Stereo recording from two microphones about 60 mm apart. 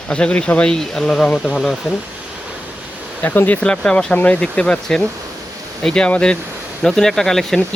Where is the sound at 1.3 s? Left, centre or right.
Centre.